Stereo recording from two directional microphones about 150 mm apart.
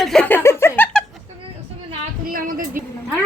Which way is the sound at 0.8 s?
15° left (ahead or behind).